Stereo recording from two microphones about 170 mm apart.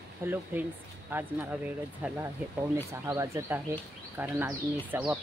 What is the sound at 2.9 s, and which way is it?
Speech, 15° right (ahead or behind).